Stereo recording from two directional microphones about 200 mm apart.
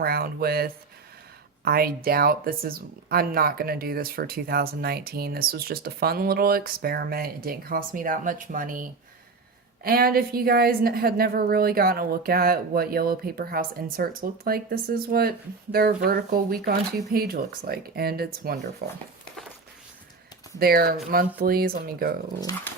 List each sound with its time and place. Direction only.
0.0 s speech: 50° right (ahead or behind)
20.6 s speech: 50° right (ahead or behind)
22.4 s speech: 15° left (ahead or behind)